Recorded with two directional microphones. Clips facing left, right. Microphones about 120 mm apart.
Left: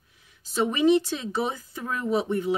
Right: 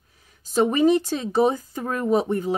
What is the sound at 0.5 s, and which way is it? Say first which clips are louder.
Speech: right 3 dB; 45° right (ahead or behind).